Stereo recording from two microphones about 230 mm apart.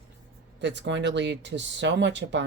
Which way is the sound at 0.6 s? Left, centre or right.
Right.